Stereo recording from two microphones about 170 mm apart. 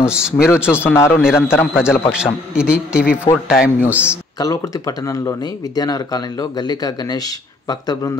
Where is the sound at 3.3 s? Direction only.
25° left (ahead or behind).